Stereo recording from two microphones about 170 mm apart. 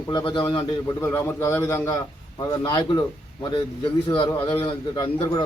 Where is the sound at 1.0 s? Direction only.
15° left (ahead or behind).